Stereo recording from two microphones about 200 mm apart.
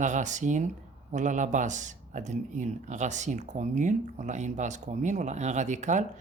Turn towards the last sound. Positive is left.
turn(degrees=-35)  # may be behind; listen again after turning